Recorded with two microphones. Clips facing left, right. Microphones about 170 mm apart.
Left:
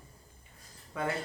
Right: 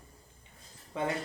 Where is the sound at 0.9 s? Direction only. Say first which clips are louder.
Right 1 dB; 25° right (ahead or behind).